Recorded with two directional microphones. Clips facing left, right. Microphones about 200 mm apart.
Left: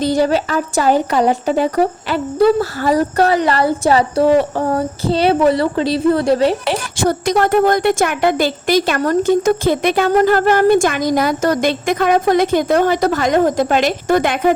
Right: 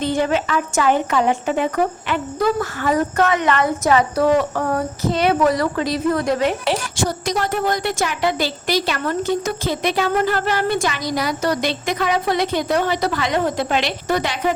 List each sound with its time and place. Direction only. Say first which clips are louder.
0.0 s speech: left 4 dB; 35° left (ahead or behind)
6.7 s a woman's voice: left 4 dB; 55° left (ahead or behind)